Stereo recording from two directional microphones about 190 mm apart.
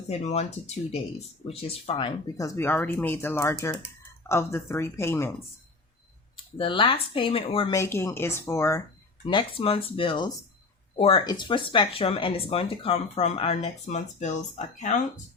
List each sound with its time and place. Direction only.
0.1 s speech: 35° left (ahead or behind)
2.4 s speech: 10° left (ahead or behind)
6.3 s speech: 25° left (ahead or behind)
7.7 s speech: 15° left (ahead or behind)
9.2 s speech: 30° left (ahead or behind)